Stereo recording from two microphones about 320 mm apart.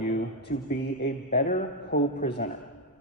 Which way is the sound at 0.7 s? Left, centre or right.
Left.